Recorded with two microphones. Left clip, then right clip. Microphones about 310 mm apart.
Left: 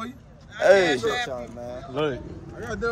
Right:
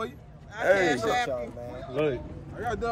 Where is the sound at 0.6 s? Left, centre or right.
Left.